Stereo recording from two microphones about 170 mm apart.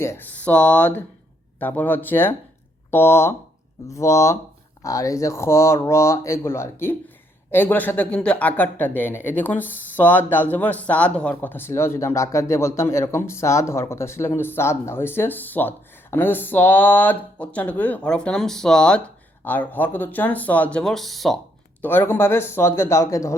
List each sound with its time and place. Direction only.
0.0 s speech: 15° left (ahead or behind)